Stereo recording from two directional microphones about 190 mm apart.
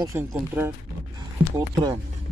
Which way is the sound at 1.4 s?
30° right (ahead or behind).